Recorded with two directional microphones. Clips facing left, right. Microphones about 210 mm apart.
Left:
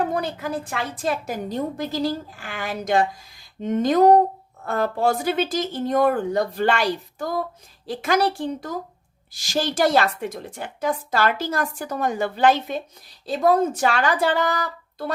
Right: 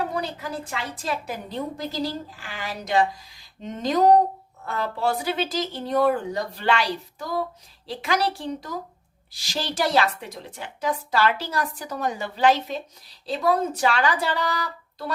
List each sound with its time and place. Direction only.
0.0 s a woman's voice: 50° left (ahead or behind)